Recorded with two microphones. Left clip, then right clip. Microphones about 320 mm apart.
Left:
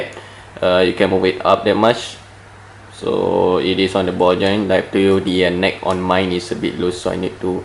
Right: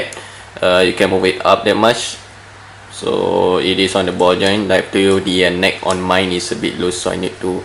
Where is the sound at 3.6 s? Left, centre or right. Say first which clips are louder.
Right 2 dB; centre.